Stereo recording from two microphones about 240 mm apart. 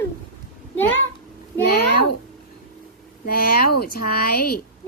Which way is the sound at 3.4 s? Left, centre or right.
Left.